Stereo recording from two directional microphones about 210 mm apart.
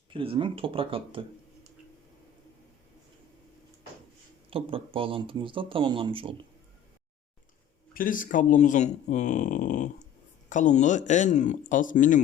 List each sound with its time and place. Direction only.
0.1 s speech: 25° right (ahead or behind)
4.4 s speech: 25° right (ahead or behind)
7.9 s speech: 40° left (ahead or behind)